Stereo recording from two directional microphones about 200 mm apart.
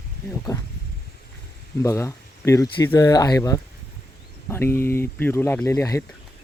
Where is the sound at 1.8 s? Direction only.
15° left (ahead or behind).